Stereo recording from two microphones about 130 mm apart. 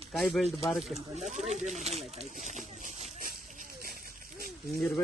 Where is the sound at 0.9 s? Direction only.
60° right (ahead or behind).